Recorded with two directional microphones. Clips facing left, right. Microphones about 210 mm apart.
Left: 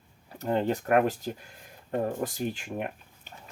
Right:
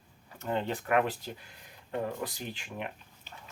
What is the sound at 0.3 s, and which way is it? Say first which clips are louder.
Speech: left 5 dB; 40° left (ahead or behind).